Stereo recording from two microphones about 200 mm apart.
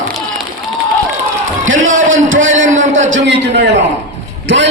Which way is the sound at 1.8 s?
75° right (ahead or behind).